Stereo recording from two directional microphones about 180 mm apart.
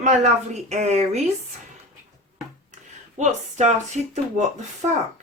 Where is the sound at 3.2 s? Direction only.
40° right (ahead or behind).